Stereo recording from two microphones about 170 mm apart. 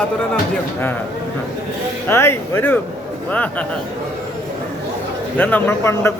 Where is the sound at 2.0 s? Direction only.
15° left (ahead or behind).